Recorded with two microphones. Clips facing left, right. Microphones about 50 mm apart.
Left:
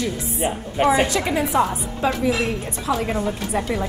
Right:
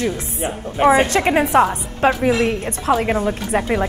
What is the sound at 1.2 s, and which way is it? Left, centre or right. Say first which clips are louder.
Speech: right 5 dB; right.